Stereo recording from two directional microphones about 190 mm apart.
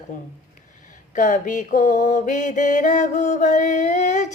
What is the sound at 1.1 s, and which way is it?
Mantra, 40° left (ahead or behind).